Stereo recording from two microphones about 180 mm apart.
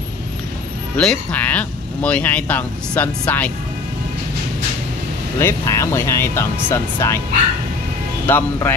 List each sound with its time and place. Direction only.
0.9 s speech: 5° left (ahead or behind)
5.4 s speech: 15° left (ahead or behind)
8.3 s speech: 10° left (ahead or behind)